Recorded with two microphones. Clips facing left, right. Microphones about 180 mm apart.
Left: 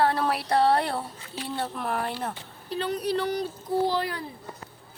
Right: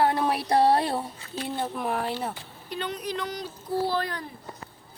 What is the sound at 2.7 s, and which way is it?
Speech, 35° left (ahead or behind).